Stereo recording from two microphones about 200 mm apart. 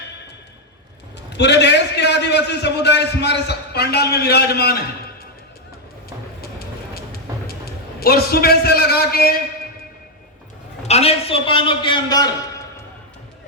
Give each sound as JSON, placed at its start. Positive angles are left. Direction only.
{"t": 1.4, "sound": "a man's voice", "side_deg": 60}
{"t": 6.9, "sound": "a sound", "side_deg": 50}
{"t": 7.9, "sound": "a man's voice", "side_deg": 50}
{"t": 10.8, "sound": "a man's voice", "side_deg": 30}